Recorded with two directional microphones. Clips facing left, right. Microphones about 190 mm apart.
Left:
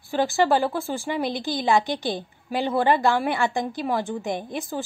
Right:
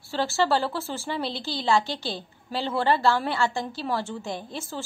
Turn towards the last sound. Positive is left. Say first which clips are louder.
# left 5 dB
turn(degrees=15)  # may be behind; listen again after turning